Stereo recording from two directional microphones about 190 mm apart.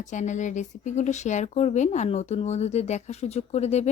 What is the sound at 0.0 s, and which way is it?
Speech, 40° left (ahead or behind).